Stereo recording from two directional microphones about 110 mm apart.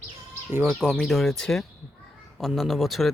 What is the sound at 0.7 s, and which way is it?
Speech, centre (ahead or behind).